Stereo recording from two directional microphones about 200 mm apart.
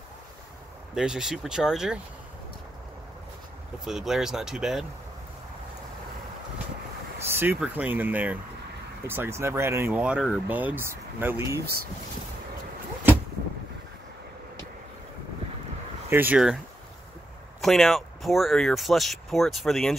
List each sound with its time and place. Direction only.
0.9 s speech: 5° right (ahead or behind)
3.8 s speech: centre (ahead or behind)
7.2 s speech: 10° right (ahead or behind)
11.6 s speech: 50° right (ahead or behind)
16.1 s speech: 10° right (ahead or behind)
17.6 s speech: centre (ahead or behind)